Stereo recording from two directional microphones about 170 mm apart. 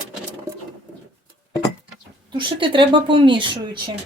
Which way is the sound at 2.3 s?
30° right (ahead or behind).